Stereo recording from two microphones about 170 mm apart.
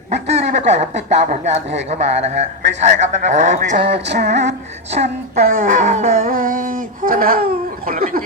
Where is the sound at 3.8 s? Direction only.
85° right.